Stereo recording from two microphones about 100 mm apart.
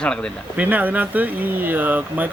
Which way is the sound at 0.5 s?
15° right (ahead or behind).